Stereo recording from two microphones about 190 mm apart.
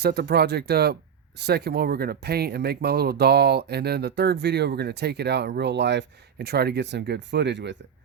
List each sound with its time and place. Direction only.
0.0 s speech: 55° right (ahead or behind)